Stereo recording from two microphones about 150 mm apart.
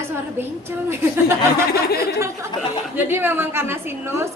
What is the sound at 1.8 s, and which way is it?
Speech, 90° left.